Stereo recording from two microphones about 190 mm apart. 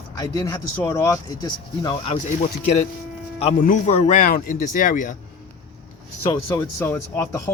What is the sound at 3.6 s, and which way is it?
Speech, 40° left (ahead or behind).